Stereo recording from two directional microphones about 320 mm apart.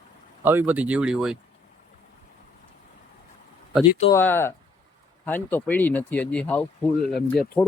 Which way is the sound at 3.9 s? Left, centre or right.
Left.